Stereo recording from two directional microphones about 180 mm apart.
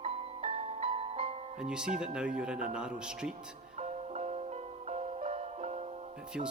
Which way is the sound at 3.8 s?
35° right (ahead or behind).